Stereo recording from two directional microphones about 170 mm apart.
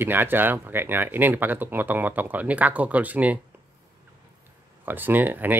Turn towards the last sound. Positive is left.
turn(degrees=-10)  # may be behind; listen again after turning